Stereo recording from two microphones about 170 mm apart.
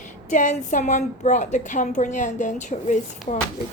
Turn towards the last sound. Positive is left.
turn(degrees=45)  # may be behind; listen again after turning